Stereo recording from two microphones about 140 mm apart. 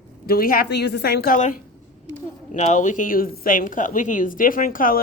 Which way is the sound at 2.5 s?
60° left (ahead or behind).